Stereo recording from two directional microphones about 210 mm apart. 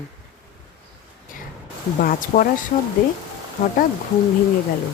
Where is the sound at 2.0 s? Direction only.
40° left (ahead or behind).